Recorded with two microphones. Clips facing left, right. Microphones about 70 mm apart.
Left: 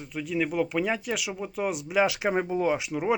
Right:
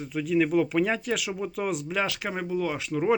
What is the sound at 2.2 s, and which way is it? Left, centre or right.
Speech, left.